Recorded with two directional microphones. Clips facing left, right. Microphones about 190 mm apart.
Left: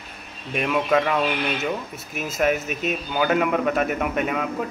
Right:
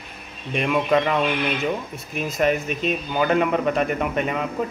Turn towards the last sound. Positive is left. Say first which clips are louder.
# right 1 dB
turn(degrees=0)  # may be behind; listen again after turning